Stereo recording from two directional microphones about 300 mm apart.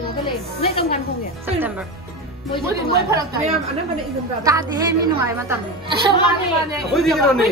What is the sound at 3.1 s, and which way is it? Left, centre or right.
A woman's voice, centre.